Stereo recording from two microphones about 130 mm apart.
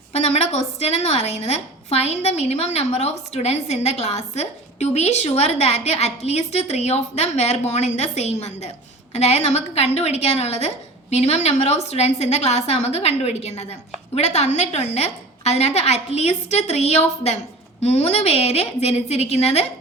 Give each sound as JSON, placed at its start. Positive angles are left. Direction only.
{"t": 0.1, "sound": "a woman's voice", "side_deg": 55}